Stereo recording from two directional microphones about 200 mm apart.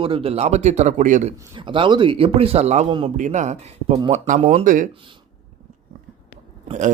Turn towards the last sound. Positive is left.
turn(degrees=-40)  # may be behind; listen again after turning